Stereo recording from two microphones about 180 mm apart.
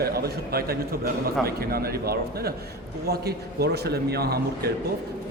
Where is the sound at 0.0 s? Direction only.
60° right (ahead or behind).